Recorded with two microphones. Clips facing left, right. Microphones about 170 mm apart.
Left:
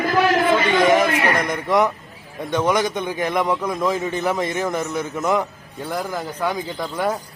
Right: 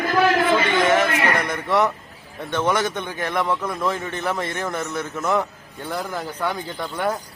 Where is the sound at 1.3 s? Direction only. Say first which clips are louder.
Left 2 dB; 10° left (ahead or behind).